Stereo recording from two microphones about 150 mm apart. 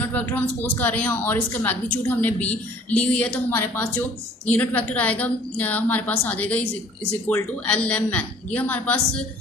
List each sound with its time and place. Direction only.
0.1 s a woman's voice: 10° left (ahead or behind)